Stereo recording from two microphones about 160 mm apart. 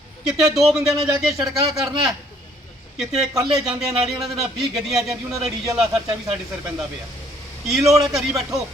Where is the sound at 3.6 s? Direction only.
5° right (ahead or behind).